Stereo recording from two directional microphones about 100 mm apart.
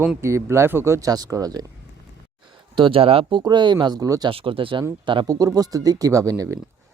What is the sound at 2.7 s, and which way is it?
Speech, 60° right (ahead or behind).